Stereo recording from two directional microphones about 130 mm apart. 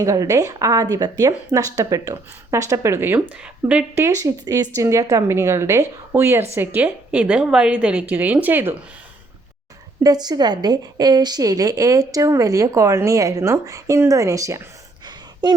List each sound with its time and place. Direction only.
0.0 s a woman's voice: 25° right (ahead or behind)
4.0 s a woman's voice: 25° right (ahead or behind)
10.0 s a woman's voice: 30° right (ahead or behind)
15.0 s a sound: 35° right (ahead or behind)